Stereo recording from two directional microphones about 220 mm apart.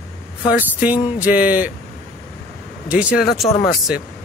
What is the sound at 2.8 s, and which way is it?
Speech, 5° right (ahead or behind).